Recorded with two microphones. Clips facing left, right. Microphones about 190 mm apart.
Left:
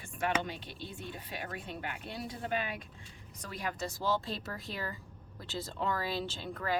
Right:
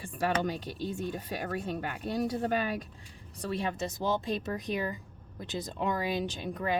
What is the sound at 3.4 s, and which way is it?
Speech, 25° right (ahead or behind).